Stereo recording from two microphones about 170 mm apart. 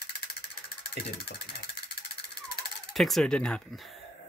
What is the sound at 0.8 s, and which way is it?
Vehicle, 75° left (ahead or behind).